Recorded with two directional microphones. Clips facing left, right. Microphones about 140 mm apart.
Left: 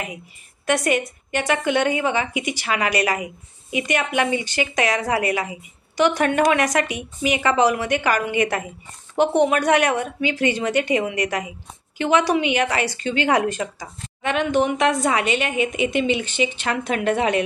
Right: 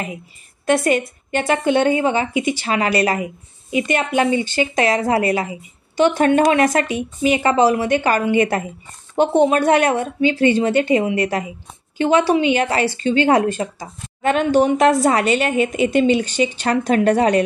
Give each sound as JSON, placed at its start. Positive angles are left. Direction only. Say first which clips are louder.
{"t": 0.7, "sound": "a woman's voice", "louder": "right 4 dB", "side_deg": -30}